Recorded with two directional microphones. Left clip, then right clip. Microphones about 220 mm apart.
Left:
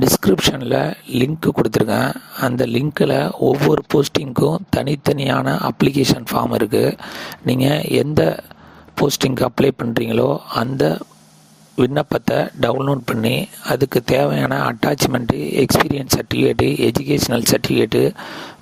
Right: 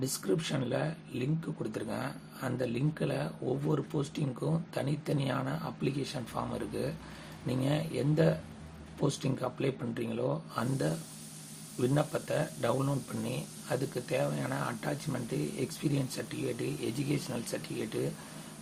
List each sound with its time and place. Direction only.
0.0 s speech: 50° left (ahead or behind)